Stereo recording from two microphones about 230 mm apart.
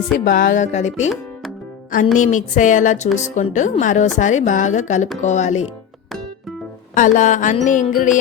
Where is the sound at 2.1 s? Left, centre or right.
Left.